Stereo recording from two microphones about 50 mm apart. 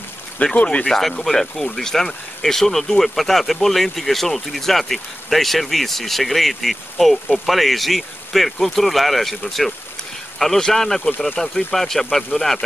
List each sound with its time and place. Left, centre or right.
0.4 s speech: left
0.8 s speech: centre